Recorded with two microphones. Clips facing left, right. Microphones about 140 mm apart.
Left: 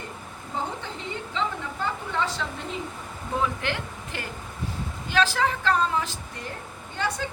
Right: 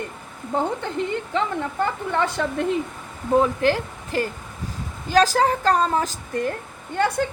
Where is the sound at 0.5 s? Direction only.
60° right (ahead or behind).